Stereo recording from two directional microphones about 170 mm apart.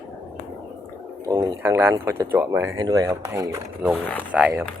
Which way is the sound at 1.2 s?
20° right (ahead or behind).